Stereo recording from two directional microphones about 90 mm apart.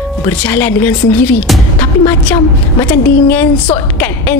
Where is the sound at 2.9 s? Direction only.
20° left (ahead or behind).